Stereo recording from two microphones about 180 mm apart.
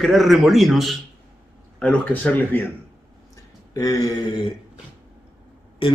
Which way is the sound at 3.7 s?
20° left (ahead or behind).